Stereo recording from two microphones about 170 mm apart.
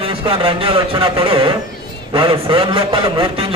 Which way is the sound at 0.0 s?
30° right (ahead or behind).